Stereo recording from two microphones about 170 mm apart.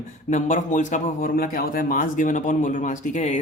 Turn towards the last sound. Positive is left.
turn(degrees=45)  # may be behind; listen again after turning